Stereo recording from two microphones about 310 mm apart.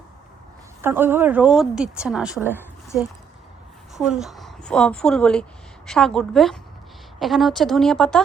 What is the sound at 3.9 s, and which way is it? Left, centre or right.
A woman's voice, centre.